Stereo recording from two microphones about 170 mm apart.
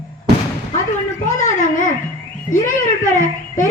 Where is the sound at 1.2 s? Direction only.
45° left (ahead or behind).